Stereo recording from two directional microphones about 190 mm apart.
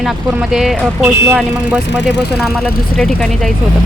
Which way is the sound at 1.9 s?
65° left (ahead or behind).